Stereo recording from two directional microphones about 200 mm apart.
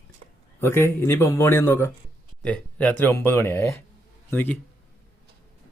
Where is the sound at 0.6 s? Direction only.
10° left (ahead or behind).